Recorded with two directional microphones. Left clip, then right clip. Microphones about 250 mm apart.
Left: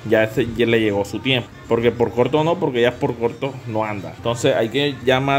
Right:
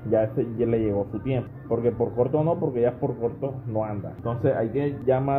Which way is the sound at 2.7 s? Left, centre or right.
Left.